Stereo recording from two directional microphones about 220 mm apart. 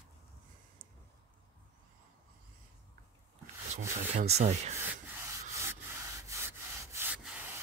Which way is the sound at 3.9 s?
30° right (ahead or behind).